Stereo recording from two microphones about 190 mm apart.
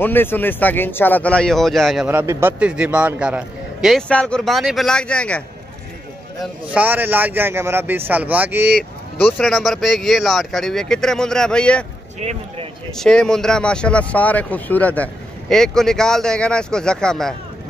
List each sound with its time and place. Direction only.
0.0 s speech: 10° left (ahead or behind)
2.0 s a man's voice: 10° right (ahead or behind); by 5.4 s 5° left (ahead or behind)
6.4 s a man's voice: 5° right (ahead or behind)
12.2 s speech: 35° right (ahead or behind)
12.9 s a man's voice: 5° left (ahead or behind)